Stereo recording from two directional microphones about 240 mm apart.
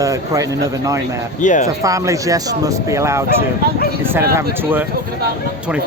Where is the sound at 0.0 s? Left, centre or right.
Centre.